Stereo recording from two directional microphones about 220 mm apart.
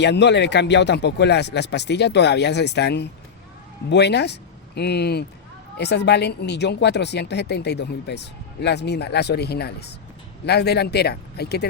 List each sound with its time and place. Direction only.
0.0 s speech: 50° left (ahead or behind)